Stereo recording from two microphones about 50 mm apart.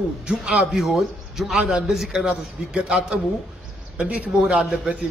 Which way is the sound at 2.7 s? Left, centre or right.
Right.